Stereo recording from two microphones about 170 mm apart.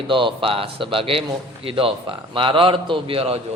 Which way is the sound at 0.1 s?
30° right (ahead or behind).